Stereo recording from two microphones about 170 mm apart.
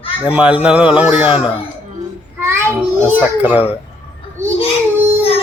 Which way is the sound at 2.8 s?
10° right (ahead or behind).